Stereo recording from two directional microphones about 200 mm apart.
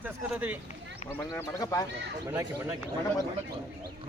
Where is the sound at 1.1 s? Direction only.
10° left (ahead or behind).